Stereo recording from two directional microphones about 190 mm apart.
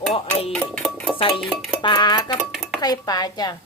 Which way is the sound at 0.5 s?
5° left (ahead or behind).